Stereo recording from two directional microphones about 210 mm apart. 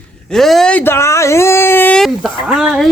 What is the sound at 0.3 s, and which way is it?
Speech, centre (ahead or behind).